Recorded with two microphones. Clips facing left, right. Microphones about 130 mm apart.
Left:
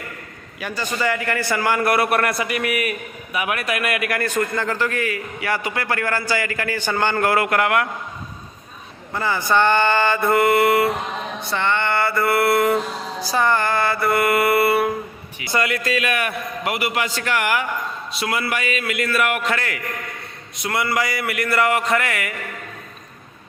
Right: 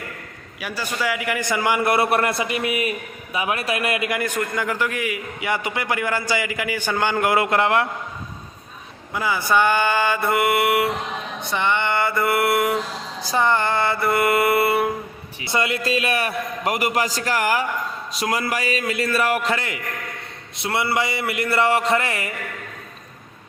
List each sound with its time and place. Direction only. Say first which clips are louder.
0.6 s a man's voice: left 2 dB; 5° right (ahead or behind); by 7.9 s 30° right (ahead or behind)
9.1 s a man's voice: left 1 dB; 10° right (ahead or behind); by 19.5 s 35° right (ahead or behind)
19.5 s a man's voice: left 1 dB; 20° right (ahead or behind)